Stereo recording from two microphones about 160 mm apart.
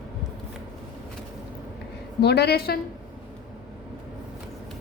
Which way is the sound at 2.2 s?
90° left.